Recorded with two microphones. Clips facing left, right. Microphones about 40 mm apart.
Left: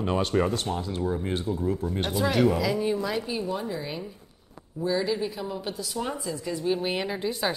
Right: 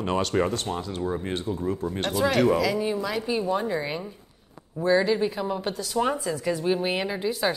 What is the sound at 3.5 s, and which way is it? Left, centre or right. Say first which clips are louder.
Speech: right 5 dB; right.